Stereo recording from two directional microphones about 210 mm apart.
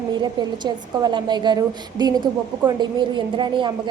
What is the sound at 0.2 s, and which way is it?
A woman's voice, 20° right (ahead or behind).